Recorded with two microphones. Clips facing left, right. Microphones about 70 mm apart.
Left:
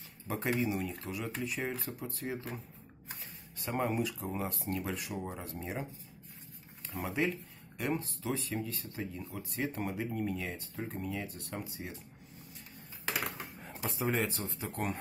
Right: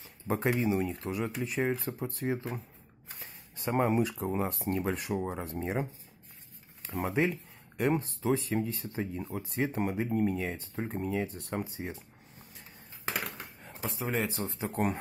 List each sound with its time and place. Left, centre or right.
0.3 s speech: right
3.5 s speech: right
7.2 s speech: right
13.8 s speech: centre
14.3 s speech: right